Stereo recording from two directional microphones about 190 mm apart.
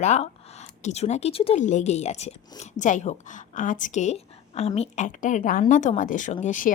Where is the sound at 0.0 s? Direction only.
35° left (ahead or behind).